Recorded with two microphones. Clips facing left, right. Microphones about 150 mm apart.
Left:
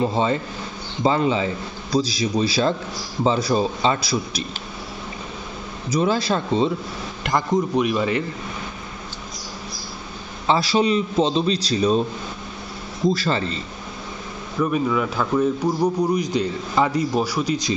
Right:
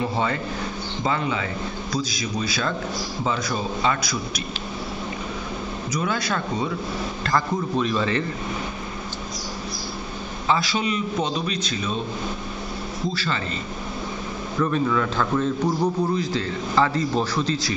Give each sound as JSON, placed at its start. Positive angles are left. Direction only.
{"t": 0.0, "sound": "a man's voice", "side_deg": 25}
{"t": 5.9, "sound": "a man's voice", "side_deg": 30}
{"t": 10.4, "sound": "a man's voice", "side_deg": 35}
{"t": 13.1, "sound": "a man's voice", "side_deg": 40}
{"t": 14.6, "sound": "a man's voice", "side_deg": 10}